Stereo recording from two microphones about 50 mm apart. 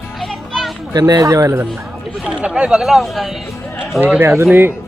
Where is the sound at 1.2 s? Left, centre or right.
Right.